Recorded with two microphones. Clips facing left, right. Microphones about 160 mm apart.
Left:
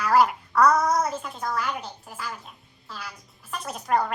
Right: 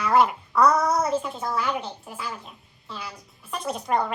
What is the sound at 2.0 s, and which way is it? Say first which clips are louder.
A woman's voice: right 2 dB; centre (ahead or behind).